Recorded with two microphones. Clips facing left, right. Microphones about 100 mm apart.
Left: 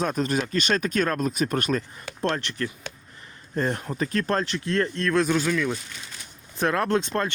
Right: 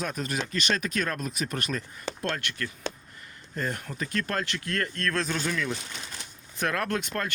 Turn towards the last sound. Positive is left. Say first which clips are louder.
# left 6 dB
turn(degrees=25)  # may be behind; listen again after turning